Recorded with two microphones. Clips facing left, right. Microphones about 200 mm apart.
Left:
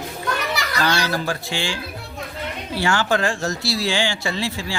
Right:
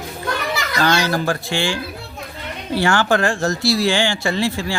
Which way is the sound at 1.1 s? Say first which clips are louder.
Right 4 dB; 55° right (ahead or behind).